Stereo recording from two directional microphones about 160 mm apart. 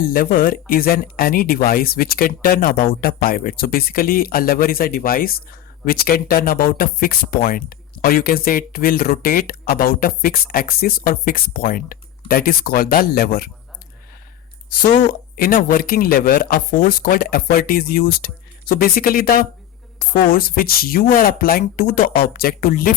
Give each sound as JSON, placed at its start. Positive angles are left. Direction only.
{"t": 0.0, "sound": "speech", "side_deg": 65}
{"t": 15.4, "sound": "speech", "side_deg": 60}